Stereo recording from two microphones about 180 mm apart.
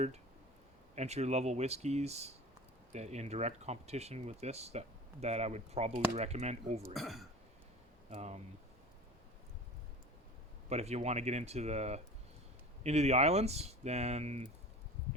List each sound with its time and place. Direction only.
0.9 s speech: 35° right (ahead or behind)
6.9 s speech: centre (ahead or behind)
8.1 s speech: 35° right (ahead or behind)
10.7 s speech: 35° right (ahead or behind)